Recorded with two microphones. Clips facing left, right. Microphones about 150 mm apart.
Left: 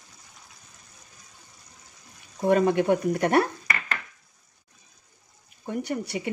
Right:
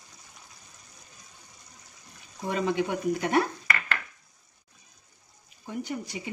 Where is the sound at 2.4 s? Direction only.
55° left (ahead or behind).